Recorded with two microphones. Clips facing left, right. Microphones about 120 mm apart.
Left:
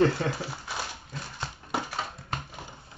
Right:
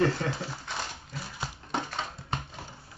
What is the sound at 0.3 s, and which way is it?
Speech, 10° left (ahead or behind).